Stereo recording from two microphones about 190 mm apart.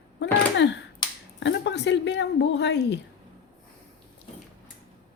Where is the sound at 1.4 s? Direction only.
70° left (ahead or behind).